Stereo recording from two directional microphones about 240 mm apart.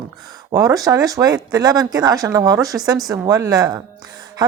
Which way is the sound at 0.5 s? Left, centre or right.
Centre.